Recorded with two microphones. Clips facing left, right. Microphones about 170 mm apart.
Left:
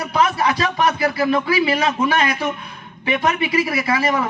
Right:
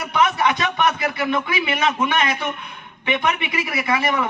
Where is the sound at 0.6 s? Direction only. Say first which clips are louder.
Left 2 dB; 30° left (ahead or behind).